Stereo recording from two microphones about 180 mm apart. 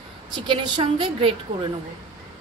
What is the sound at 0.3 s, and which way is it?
A woman's voice, 25° right (ahead or behind).